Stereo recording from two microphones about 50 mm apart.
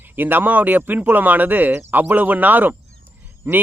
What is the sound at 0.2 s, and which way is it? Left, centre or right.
Speech, right.